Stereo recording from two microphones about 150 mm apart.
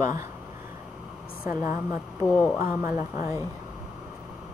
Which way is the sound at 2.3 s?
15° left (ahead or behind).